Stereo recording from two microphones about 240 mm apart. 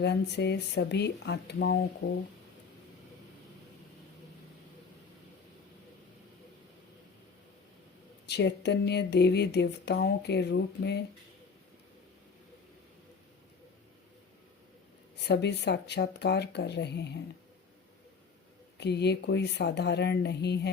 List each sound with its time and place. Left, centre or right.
0.0 s speech: left
8.3 s speech: left
15.3 s speech: left
18.8 s speech: left